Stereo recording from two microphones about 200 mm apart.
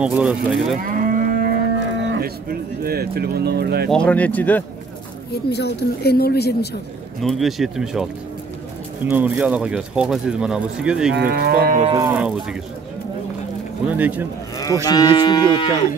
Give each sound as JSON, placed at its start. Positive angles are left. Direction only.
{"t": 0.0, "sound": "speech", "side_deg": -5}
{"t": 0.7, "sound": "moo", "side_deg": -45}
{"t": 2.0, "sound": "speech", "side_deg": -60}
{"t": 3.9, "sound": "speech", "side_deg": 5}
{"t": 5.3, "sound": "speech", "side_deg": 55}
{"t": 7.2, "sound": "speech", "side_deg": 0}
{"t": 11.1, "sound": "livestock", "side_deg": -50}
{"t": 11.8, "sound": "speech", "side_deg": -25}
{"t": 12.1, "sound": "speech", "side_deg": -5}
{"t": 13.8, "sound": "speech", "side_deg": -10}
{"t": 14.9, "sound": "speech", "side_deg": 20}